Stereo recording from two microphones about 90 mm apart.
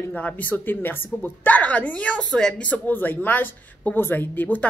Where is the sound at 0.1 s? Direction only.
20° left (ahead or behind).